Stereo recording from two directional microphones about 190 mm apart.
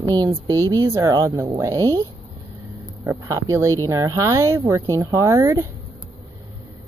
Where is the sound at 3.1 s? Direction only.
15° right (ahead or behind).